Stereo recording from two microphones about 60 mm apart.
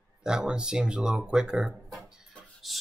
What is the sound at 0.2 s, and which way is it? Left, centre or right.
Speech, centre.